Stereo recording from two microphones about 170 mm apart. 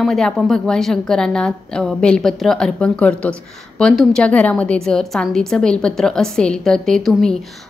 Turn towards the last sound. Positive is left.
turn(degrees=5)  # may be behind; listen again after turning